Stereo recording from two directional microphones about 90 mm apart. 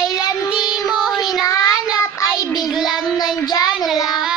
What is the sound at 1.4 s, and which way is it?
Child singing, 40° left (ahead or behind).